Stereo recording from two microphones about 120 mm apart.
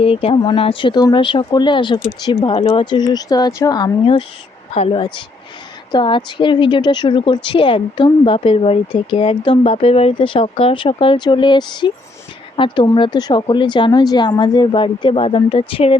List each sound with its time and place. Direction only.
0.0 s a woman's voice: 50° left (ahead or behind); by 3.9 s 30° left (ahead or behind)
4.7 s speech: 60° left (ahead or behind)
4.9 s a woman's voice: 40° left (ahead or behind)